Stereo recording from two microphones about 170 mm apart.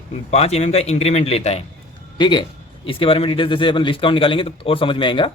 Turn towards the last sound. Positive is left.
turn(degrees=30)  # may be behind; listen again after turning